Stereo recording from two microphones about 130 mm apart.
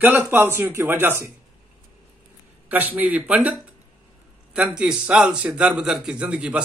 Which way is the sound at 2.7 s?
10° right (ahead or behind).